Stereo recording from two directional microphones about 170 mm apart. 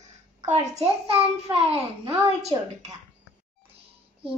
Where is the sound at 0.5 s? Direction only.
35° right (ahead or behind).